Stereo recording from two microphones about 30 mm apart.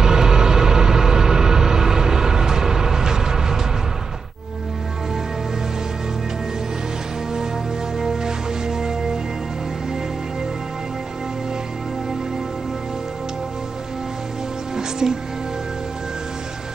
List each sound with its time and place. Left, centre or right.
0.0 s a sound: right
8.0 s music: centre
14.8 s music: centre